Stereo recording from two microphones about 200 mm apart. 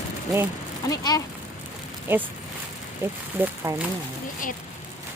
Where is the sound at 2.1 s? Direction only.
10° right (ahead or behind).